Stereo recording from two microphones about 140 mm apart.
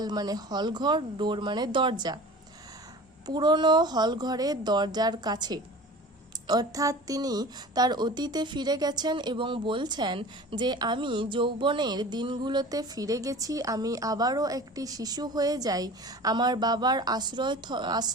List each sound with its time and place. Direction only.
0.0 s speech: 30° right (ahead or behind)
3.2 s a woman's voice: 30° right (ahead or behind)